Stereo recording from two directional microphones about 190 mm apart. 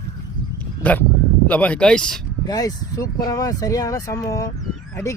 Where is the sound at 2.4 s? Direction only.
20° left (ahead or behind).